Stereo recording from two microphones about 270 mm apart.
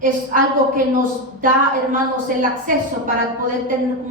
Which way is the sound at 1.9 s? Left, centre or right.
Right.